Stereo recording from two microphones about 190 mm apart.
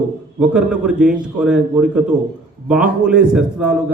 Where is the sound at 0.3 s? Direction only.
5° right (ahead or behind).